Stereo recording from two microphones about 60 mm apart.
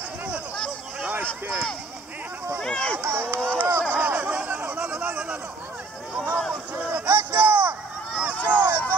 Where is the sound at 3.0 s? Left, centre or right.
Right.